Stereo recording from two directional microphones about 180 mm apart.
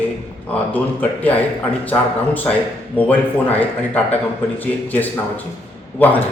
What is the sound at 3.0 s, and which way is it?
A man's voice, 10° left (ahead or behind).